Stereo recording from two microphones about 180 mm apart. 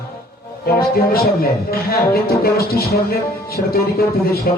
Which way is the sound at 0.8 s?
55° left (ahead or behind).